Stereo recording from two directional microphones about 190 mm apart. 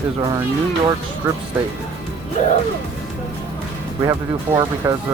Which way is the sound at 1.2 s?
15° right (ahead or behind).